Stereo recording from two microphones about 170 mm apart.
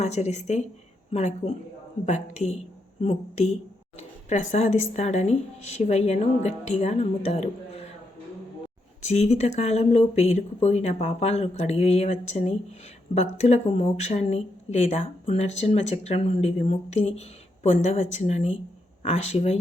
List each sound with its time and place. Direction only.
0.0 s speech: 40° left (ahead or behind)
9.0 s speech: 40° left (ahead or behind)